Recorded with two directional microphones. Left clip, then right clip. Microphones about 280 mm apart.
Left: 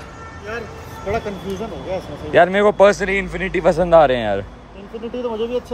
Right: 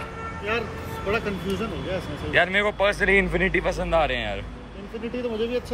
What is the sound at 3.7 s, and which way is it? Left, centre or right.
Speech, left.